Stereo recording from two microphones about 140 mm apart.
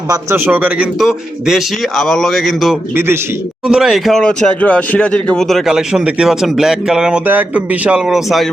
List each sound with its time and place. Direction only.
0.1 s speech: 20° right (ahead or behind); by 2.7 s centre (ahead or behind)
2.9 s a man's voice: 15° right (ahead or behind)
3.7 s speech: 5° right (ahead or behind)